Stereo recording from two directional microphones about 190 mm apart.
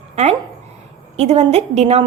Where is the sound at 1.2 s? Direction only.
35° right (ahead or behind).